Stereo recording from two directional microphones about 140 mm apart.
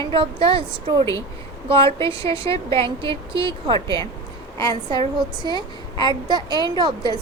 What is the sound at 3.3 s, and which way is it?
Speech, 35° right (ahead or behind).